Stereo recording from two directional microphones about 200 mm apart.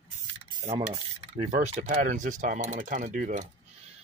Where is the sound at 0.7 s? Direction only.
20° right (ahead or behind).